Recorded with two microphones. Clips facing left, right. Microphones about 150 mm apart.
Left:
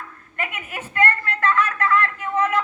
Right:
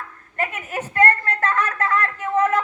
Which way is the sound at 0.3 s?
40° right (ahead or behind).